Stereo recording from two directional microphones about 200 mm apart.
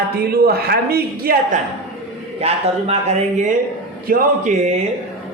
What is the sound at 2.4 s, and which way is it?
Speech, 30° right (ahead or behind).